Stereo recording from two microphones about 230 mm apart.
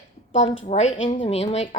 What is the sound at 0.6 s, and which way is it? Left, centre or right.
A woman's voice, left.